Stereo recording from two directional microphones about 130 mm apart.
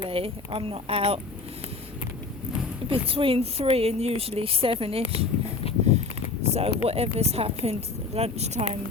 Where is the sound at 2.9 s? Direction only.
45° right (ahead or behind).